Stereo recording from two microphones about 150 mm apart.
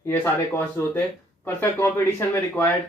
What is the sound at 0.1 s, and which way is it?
Speech, 15° left (ahead or behind).